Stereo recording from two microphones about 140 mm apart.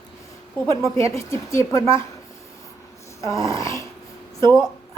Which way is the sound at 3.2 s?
20° left (ahead or behind).